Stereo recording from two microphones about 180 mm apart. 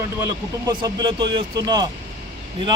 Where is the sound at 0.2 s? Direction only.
20° right (ahead or behind).